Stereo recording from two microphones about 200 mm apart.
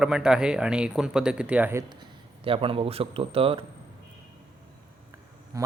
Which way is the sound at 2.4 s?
25° right (ahead or behind).